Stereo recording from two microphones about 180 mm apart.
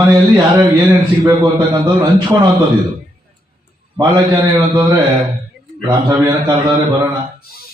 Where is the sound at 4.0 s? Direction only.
20° right (ahead or behind).